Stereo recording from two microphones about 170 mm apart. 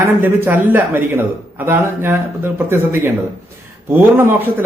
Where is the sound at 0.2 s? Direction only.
10° right (ahead or behind).